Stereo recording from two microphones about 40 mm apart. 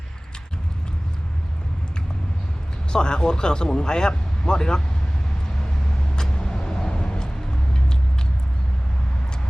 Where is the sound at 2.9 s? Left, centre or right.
Left.